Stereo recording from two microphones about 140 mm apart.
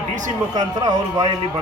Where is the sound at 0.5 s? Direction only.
30° right (ahead or behind).